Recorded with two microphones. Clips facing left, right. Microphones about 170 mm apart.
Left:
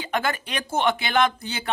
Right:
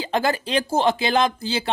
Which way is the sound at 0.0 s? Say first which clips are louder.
Right 4 dB; 30° right (ahead or behind).